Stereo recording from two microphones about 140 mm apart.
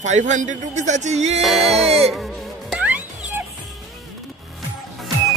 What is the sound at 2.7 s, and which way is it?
Music, 10° right (ahead or behind).